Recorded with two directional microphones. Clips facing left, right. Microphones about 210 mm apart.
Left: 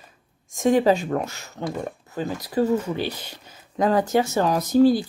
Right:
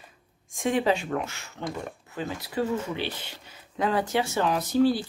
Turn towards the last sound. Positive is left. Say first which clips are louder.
# left 5 dB
turn(degrees=40)  # may be behind; listen again after turning